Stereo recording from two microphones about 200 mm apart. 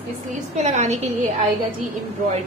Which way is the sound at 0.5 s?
35° right (ahead or behind).